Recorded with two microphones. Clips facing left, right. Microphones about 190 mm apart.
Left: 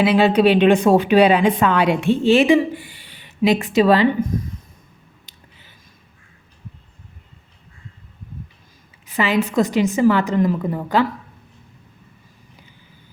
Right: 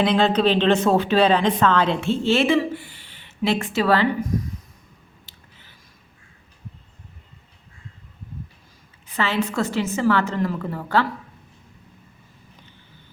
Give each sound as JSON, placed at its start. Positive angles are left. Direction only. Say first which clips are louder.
{"t": 0.0, "sound": "speech", "louder": "left 4 dB", "side_deg": 10}
{"t": 5.3, "sound": "a sound", "louder": "even", "side_deg": 20}
{"t": 9.1, "sound": "speech", "louder": "left 5 dB", "side_deg": 15}